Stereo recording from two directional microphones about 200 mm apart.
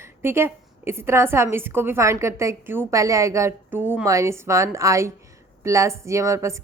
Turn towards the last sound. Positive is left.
turn(degrees=-15)  # may be behind; listen again after turning